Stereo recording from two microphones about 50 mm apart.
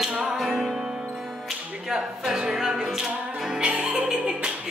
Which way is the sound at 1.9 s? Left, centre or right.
Centre.